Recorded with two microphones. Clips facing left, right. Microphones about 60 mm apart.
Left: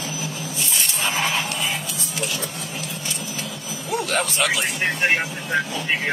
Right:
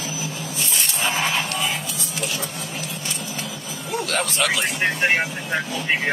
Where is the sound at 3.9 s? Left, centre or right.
Centre.